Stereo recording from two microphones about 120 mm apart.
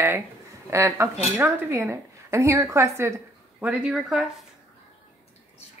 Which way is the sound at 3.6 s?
10° right (ahead or behind).